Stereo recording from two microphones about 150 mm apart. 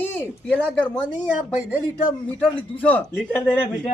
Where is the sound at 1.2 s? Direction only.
10° right (ahead or behind).